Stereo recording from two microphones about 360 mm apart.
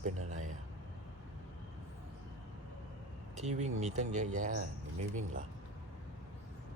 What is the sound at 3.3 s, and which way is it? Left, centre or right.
Speech, centre.